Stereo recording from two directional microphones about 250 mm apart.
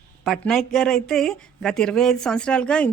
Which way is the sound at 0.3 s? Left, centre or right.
Centre.